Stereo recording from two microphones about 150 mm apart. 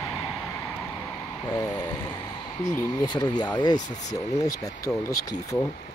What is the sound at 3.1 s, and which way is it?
Speech, 25° left (ahead or behind).